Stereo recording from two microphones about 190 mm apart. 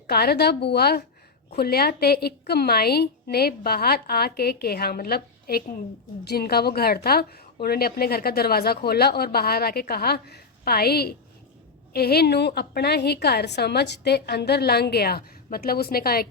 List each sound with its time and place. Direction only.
0.1 s a woman's voice: 55° left (ahead or behind)